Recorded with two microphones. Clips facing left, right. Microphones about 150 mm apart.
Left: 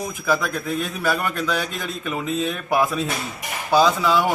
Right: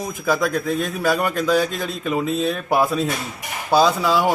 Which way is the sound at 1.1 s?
15° right (ahead or behind).